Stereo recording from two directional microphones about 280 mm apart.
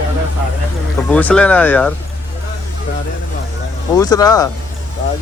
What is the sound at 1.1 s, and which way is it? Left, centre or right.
Speech, centre.